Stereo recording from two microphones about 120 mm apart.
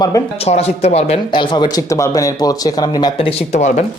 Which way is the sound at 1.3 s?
40° left (ahead or behind).